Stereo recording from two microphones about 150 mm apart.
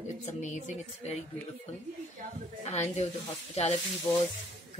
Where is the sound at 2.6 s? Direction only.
45° left (ahead or behind).